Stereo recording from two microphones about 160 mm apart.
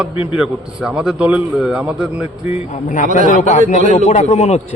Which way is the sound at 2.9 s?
55° left (ahead or behind).